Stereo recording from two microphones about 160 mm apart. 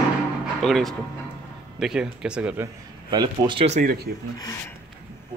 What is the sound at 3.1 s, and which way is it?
Speech, 25° right (ahead or behind).